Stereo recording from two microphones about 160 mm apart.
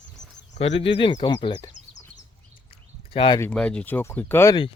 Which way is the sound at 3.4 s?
5° left (ahead or behind).